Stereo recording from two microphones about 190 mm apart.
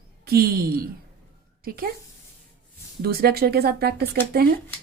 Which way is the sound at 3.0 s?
55° right (ahead or behind).